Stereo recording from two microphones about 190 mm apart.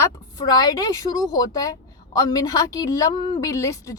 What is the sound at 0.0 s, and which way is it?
A woman's voice, 20° left (ahead or behind).